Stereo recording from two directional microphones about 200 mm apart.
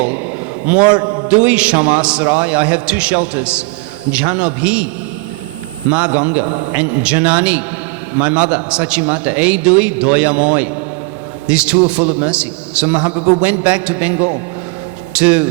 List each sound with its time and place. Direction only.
0.6 s a man's voice: 5° right (ahead or behind)
0.9 s a man's voice: 20° right (ahead or behind)
1.3 s a man's voice: 5° right (ahead or behind)
5.9 s a man's voice: 5° right (ahead or behind)